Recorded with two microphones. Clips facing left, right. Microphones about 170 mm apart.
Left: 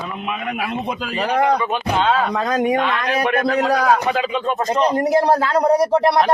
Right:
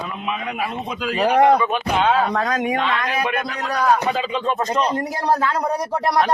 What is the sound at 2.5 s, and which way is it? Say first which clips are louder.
Speech: left 4 dB; 30° left (ahead or behind).